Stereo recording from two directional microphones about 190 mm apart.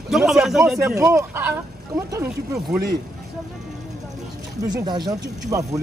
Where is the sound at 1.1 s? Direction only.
10° right (ahead or behind).